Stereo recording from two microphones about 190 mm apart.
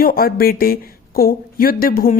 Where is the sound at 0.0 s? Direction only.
50° left (ahead or behind).